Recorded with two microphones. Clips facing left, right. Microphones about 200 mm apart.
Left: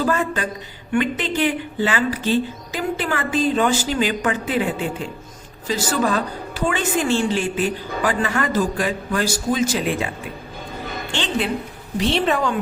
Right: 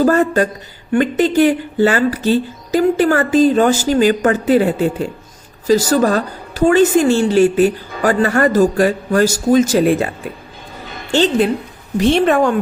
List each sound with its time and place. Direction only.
0.0 s speech: 45° right (ahead or behind)
11.1 s speech: 40° right (ahead or behind)